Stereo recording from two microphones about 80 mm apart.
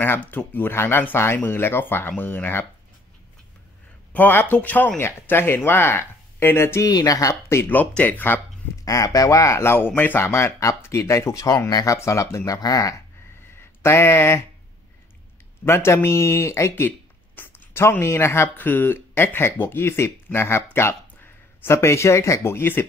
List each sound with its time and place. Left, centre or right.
0.0 s speech: left
4.1 s speech: left
6.9 s speech: left
7.4 s speech: left
7.7 s speech: left
8.8 s speech: left
13.5 s a sound: left
15.6 s speech: left